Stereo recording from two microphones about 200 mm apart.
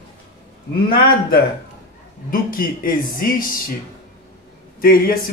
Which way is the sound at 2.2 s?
45° left (ahead or behind).